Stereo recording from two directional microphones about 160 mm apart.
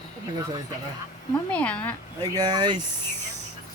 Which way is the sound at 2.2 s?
25° right (ahead or behind).